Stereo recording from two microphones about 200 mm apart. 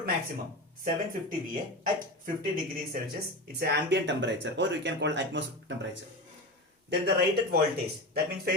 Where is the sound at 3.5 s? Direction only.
55° right (ahead or behind).